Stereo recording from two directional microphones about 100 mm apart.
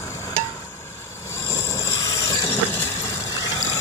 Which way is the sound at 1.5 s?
25° left (ahead or behind).